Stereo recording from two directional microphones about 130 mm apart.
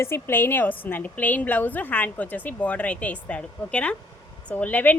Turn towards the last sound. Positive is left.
turn(degrees=10)  # may be behind; listen again after turning